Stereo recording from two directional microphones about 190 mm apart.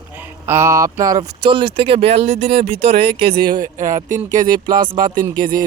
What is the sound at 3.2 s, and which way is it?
Speech, 50° right (ahead or behind).